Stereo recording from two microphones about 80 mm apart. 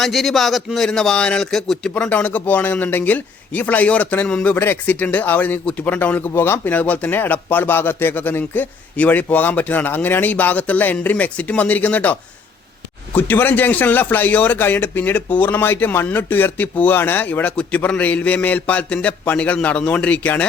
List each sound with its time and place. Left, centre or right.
0.0 s a man's voice: centre
1.9 s speech: centre
4.5 s speech: left
13.1 s speech: left